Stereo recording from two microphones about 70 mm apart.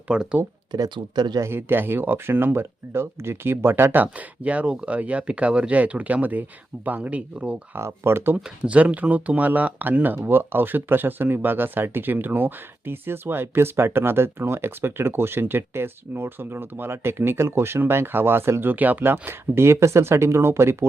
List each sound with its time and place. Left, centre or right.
0.1 s speech: centre
0.7 s speech: right
1.4 s speech: right
4.0 s speech: centre
7.8 s speech: right
8.6 s speech: centre; by 20.8 s right